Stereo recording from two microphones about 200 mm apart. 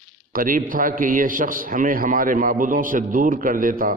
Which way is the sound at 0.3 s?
45° right (ahead or behind).